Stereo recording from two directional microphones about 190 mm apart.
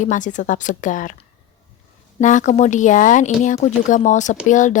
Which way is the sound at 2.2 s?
40° left (ahead or behind).